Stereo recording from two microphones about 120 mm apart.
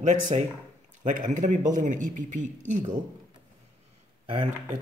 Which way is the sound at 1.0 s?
90° right.